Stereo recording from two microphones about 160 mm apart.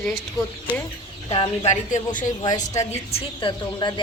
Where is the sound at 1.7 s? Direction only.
50° left (ahead or behind).